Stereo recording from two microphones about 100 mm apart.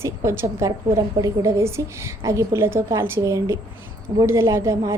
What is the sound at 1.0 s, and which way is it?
A woman's voice, 40° right (ahead or behind).